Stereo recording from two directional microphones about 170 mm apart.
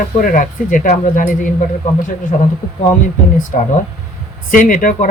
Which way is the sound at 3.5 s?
50° left (ahead or behind).